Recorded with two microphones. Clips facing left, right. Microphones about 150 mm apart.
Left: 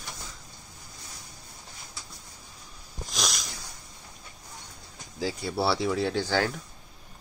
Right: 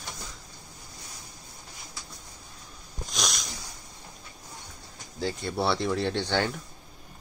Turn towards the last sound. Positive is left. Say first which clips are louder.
# left 1 dB
turn(degrees=0)  # may be behind; listen again after turning